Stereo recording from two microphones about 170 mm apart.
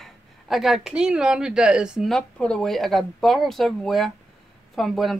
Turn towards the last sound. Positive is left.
turn(degrees=0)  # may be behind; listen again after turning